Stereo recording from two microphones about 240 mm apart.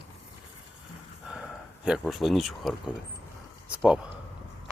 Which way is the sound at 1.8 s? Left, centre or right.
Centre.